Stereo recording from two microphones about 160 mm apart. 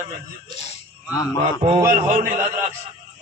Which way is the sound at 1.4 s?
40° right (ahead or behind).